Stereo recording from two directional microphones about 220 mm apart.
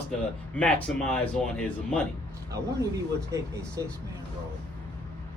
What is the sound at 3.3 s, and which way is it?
Speech, 15° right (ahead or behind).